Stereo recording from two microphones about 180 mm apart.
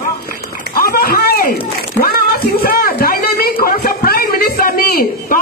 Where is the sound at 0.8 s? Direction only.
55° left (ahead or behind).